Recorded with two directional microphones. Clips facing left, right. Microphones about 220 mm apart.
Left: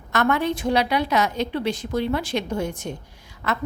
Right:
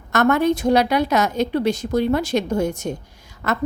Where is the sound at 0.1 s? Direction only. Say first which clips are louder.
Right 5 dB; 45° right (ahead or behind).